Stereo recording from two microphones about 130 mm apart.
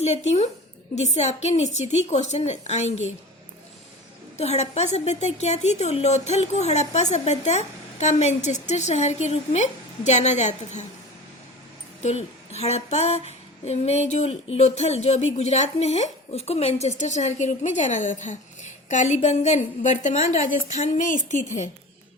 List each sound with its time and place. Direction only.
0.0 s a woman's voice: 60° left (ahead or behind)
4.4 s a woman's voice: 55° left (ahead or behind)
12.0 s a woman's voice: 55° left (ahead or behind)